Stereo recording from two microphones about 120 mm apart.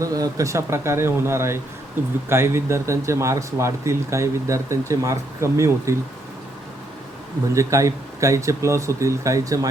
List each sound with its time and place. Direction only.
0.0 s speech: 30° right (ahead or behind)
7.5 s speech: 25° right (ahead or behind)